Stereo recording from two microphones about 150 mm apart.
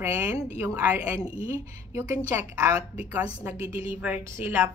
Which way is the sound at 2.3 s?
20° right (ahead or behind).